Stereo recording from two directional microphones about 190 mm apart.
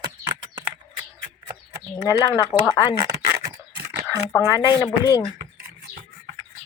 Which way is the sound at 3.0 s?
15° right (ahead or behind).